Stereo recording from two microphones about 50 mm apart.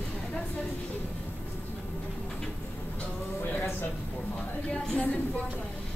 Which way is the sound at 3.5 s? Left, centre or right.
Left.